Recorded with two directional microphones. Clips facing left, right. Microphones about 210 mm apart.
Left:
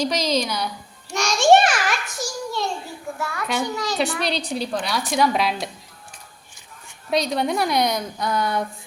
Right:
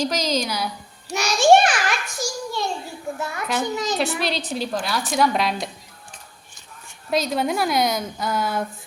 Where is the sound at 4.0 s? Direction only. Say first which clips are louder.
Even; centre (ahead or behind).